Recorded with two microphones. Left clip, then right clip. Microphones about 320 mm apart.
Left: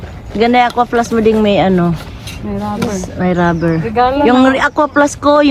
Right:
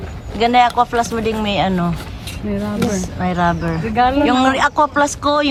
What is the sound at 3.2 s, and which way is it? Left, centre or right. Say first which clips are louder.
Speech: left 5 dB; centre.